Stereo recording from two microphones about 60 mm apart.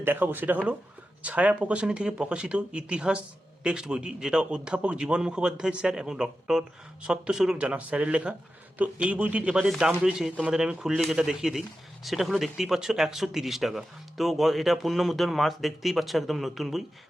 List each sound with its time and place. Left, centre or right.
0.0 s speech: right; by 16.8 s centre